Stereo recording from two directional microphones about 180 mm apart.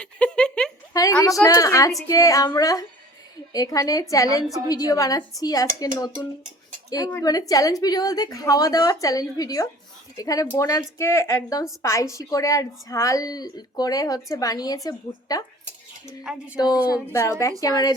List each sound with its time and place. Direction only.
0.0 s a sound: 5° left (ahead or behind)
1.2 s a woman's voice: 20° left (ahead or behind)
6.9 s a woman's voice: 20° left (ahead or behind)
16.2 s speech: 5° right (ahead or behind)
16.6 s a woman's voice: 20° left (ahead or behind)